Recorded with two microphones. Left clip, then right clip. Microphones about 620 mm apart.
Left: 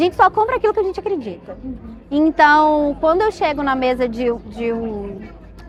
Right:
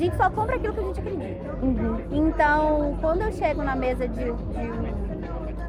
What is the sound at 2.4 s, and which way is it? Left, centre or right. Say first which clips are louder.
Speech: left 9 dB; left.